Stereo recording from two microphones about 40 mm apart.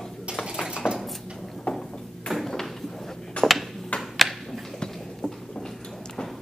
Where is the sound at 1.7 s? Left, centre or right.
Left.